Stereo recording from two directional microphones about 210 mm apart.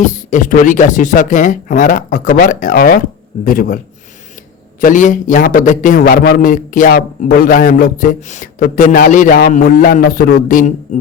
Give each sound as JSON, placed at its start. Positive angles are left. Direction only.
{"t": 0.3, "sound": "a man's voice", "side_deg": 40}
{"t": 4.8, "sound": "a man's voice", "side_deg": 40}